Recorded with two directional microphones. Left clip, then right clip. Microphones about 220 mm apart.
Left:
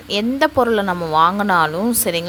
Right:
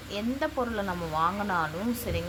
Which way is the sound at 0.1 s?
45° left (ahead or behind).